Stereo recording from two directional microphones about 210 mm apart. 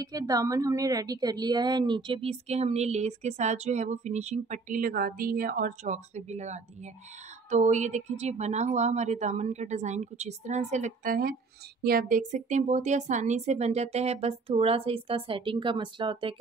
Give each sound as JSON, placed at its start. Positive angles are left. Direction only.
{"t": 0.0, "sound": "a woman's voice", "side_deg": -15}